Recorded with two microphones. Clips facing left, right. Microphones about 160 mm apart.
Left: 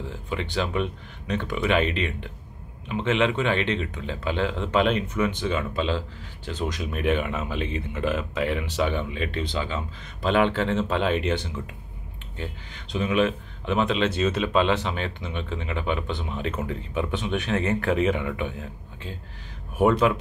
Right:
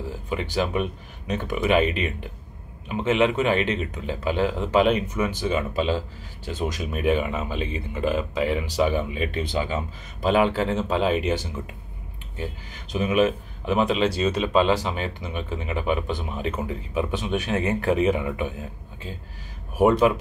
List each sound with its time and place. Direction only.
0.0 s speech: 5° right (ahead or behind)
12.9 s speech: 10° right (ahead or behind)
19.9 s speech: 15° right (ahead or behind)